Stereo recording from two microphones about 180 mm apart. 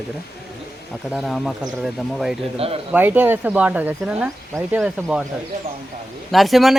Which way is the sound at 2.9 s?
10° right (ahead or behind).